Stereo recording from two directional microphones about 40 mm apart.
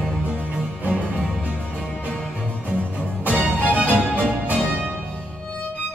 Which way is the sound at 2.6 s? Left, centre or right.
Right.